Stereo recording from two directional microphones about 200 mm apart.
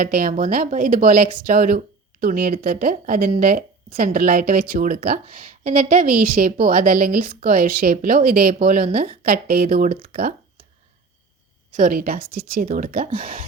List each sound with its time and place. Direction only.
0.0 s a woman's voice: 45° right (ahead or behind)
11.8 s a woman's voice: 45° right (ahead or behind)